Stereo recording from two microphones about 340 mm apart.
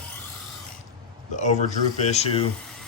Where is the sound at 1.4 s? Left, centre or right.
Left.